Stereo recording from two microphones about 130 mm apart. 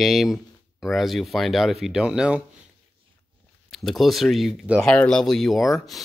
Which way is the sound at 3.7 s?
Centre (ahead or behind).